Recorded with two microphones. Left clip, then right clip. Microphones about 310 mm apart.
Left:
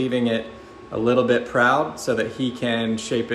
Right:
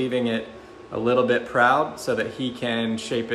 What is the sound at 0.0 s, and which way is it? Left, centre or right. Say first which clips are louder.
Speech: left 2 dB; centre.